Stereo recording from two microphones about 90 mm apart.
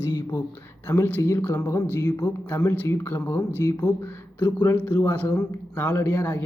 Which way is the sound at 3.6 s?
45° left (ahead or behind).